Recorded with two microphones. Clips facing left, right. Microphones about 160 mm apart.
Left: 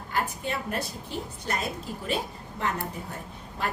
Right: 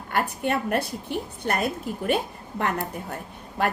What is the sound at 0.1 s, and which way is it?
A woman's voice, 65° right (ahead or behind).